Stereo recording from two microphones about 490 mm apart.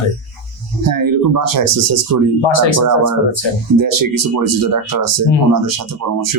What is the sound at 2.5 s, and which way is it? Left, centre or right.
Speech, left.